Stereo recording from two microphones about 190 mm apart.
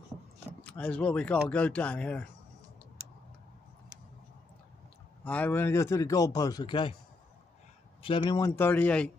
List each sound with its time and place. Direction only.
0.7 s a man's voice: 5° left (ahead or behind)
5.2 s a man's voice: 5° left (ahead or behind); by 7.0 s 25° left (ahead or behind)
8.0 s a man's voice: 25° left (ahead or behind); by 9.1 s 5° left (ahead or behind)